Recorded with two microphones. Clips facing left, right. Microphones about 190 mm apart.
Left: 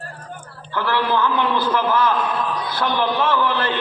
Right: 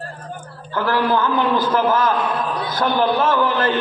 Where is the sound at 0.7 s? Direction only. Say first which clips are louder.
Right 2 dB; 45° right (ahead or behind).